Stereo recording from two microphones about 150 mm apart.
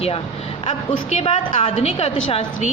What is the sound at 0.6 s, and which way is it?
A woman's voice, 40° left (ahead or behind).